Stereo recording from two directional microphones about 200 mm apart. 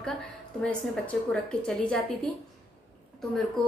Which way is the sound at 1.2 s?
5° left (ahead or behind).